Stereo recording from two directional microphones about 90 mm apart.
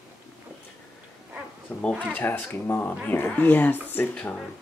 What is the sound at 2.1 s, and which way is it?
Speech, 20° left (ahead or behind).